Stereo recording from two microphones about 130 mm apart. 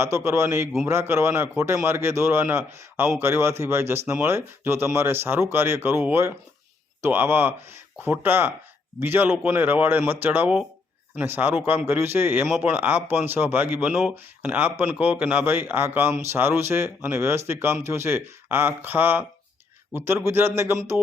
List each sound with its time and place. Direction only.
0.0 s speech: 20° right (ahead or behind)
20.2 s speech: 20° right (ahead or behind)